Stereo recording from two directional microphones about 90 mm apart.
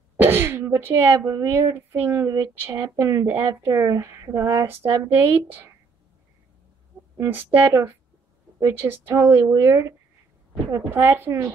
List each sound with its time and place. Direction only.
0.2 s speech: 25° right (ahead or behind)
1.2 s speech: 40° right (ahead or behind)
1.5 s speech: 30° right (ahead or behind)
7.2 s speech: 25° right (ahead or behind)